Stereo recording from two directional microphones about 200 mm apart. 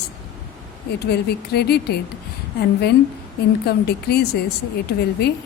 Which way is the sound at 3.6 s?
55° left (ahead or behind).